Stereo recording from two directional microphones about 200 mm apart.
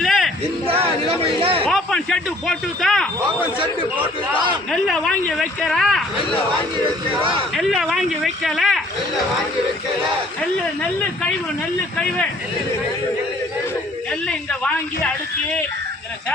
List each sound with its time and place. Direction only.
0.0 s a sound: centre (ahead or behind)
1.4 s speech: 25° right (ahead or behind)
1.6 s speech: 5° left (ahead or behind)
4.7 s speech: centre (ahead or behind)
7.2 s a man's voice: 25° right (ahead or behind)
7.5 s speech: centre (ahead or behind)
11.9 s speech: 5° left (ahead or behind)
14.1 s speech: 5° left (ahead or behind)